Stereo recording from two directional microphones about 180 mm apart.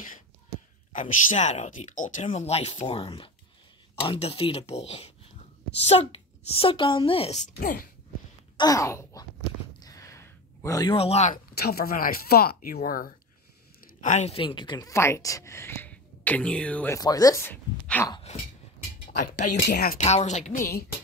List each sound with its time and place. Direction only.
0.9 s speech: 45° left (ahead or behind)
7.5 s speech: 55° left (ahead or behind)
8.5 s speech: 20° left (ahead or behind)
9.8 s a sound: 20° left (ahead or behind)
11.0 s speech: 35° left (ahead or behind)
11.5 s speech: 60° left (ahead or behind)
14.0 s speech: 40° left (ahead or behind); by 18.1 s 10° left (ahead or behind)
19.4 s speech: 55° left (ahead or behind)
20.0 s speech: 40° left (ahead or behind)